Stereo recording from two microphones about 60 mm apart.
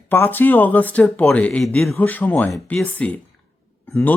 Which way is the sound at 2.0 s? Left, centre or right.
Left.